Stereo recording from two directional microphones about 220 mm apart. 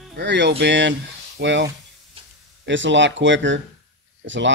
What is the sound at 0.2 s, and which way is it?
Speech, 50° right (ahead or behind).